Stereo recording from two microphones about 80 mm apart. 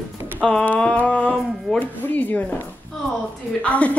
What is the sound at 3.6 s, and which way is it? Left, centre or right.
Speech, centre.